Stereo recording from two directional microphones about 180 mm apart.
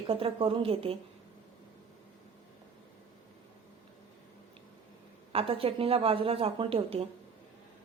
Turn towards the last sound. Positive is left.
turn(degrees=-30)  # may be behind; listen again after turning